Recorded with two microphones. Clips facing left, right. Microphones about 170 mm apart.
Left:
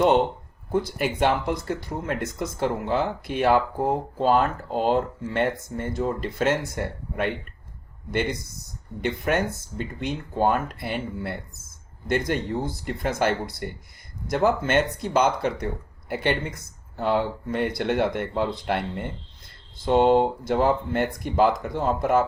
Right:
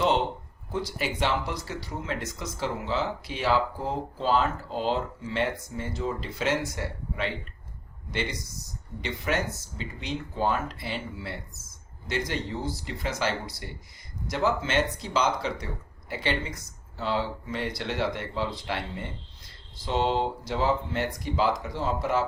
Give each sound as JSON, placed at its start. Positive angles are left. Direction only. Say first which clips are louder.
{"t": 0.7, "sound": "speech", "louder": "left 6 dB", "side_deg": 55}